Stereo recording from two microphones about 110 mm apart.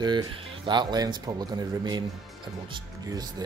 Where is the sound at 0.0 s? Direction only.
40° right (ahead or behind).